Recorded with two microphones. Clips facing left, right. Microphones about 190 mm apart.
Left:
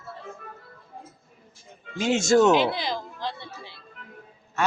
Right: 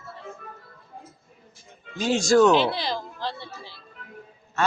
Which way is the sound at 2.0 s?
25° left (ahead or behind).